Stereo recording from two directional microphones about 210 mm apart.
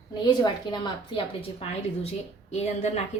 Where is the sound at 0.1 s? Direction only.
20° left (ahead or behind).